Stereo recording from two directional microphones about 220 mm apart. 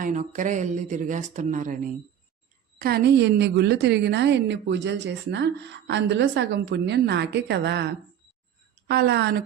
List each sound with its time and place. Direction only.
0.0 s a woman's voice: 35° right (ahead or behind)